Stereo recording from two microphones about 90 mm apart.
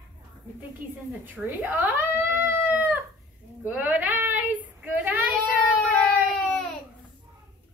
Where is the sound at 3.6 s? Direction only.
15° right (ahead or behind).